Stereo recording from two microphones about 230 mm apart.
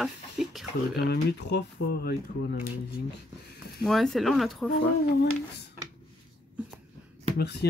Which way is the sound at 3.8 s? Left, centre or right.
Centre.